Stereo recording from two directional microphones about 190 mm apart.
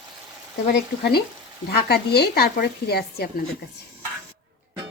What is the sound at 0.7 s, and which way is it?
Speech, 55° left (ahead or behind).